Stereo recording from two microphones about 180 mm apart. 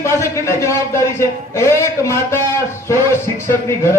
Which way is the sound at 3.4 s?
15° left (ahead or behind).